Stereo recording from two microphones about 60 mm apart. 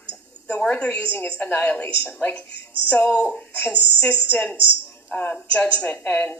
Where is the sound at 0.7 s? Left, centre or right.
Left.